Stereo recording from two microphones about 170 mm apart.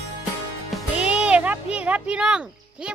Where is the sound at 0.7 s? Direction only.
5° right (ahead or behind).